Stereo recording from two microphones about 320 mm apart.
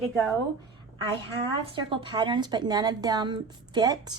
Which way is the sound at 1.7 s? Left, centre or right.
Centre.